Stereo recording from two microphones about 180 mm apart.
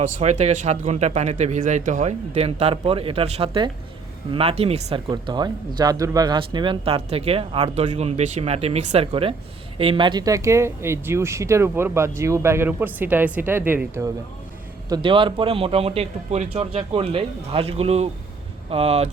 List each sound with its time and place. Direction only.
0.0 s speech: 40° right (ahead or behind); by 14.1 s 15° right (ahead or behind)
14.8 s speech: 25° right (ahead or behind)